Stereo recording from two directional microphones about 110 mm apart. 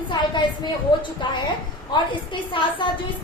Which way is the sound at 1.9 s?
45° left (ahead or behind).